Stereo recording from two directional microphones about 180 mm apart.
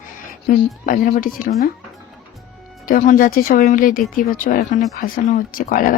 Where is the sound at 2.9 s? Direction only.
45° left (ahead or behind).